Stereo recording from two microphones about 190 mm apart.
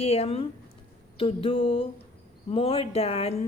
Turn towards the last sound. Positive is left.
turn(degrees=30)  # may be behind; listen again after turning